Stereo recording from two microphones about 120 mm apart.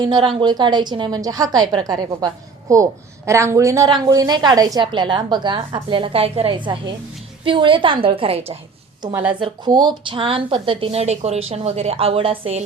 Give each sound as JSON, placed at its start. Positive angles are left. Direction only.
{"t": 0.0, "sound": "a woman's voice", "side_deg": -35}
{"t": 9.4, "sound": "a woman's voice", "side_deg": -35}